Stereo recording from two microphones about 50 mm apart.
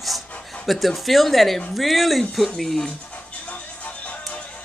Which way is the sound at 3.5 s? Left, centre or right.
Left.